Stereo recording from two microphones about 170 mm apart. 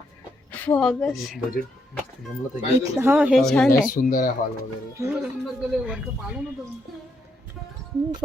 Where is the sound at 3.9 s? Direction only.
55° left (ahead or behind).